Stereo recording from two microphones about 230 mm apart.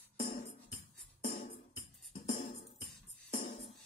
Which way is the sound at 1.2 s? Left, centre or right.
Left.